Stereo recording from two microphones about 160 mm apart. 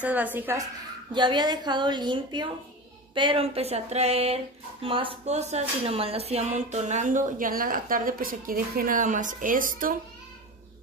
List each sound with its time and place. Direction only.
0.0 s a woman's voice: 10° right (ahead or behind)
1.1 s a woman's voice: 30° right (ahead or behind)
3.2 s a sound: 35° right (ahead or behind)
4.8 s speech: 35° right (ahead or behind); by 9.9 s 60° right (ahead or behind)